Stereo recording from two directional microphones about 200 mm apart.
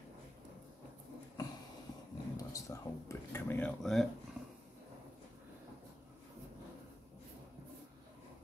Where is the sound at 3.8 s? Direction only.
Centre (ahead or behind).